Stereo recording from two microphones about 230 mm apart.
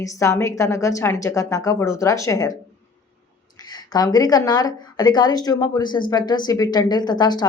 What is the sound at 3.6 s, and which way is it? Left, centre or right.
Speech, centre.